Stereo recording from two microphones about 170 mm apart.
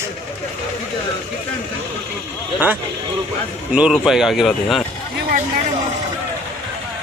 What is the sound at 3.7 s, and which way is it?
Speech, 5° right (ahead or behind).